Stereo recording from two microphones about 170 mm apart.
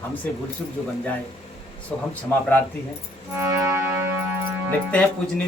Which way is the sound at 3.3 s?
15° right (ahead or behind).